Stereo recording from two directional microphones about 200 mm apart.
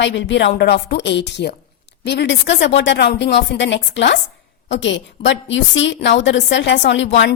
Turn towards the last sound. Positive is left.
turn(degrees=65)  # may be behind; listen again after turning